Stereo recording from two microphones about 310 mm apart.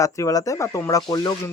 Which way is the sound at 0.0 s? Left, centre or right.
Centre.